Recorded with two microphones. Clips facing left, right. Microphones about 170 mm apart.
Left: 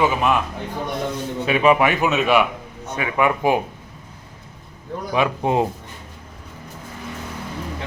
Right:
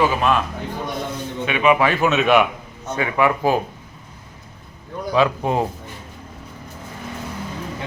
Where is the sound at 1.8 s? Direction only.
20° left (ahead or behind).